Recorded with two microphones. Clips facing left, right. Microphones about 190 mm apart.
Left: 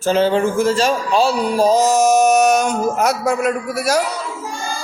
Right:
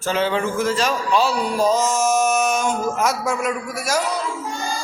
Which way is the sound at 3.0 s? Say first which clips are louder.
Left 6 dB; 65° left (ahead or behind).